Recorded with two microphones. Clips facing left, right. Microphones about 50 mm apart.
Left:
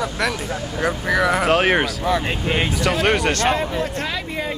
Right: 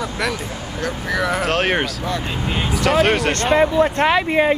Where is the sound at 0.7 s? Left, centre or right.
Centre.